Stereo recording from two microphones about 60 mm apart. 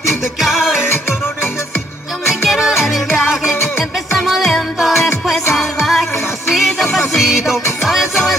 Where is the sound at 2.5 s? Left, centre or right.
Centre.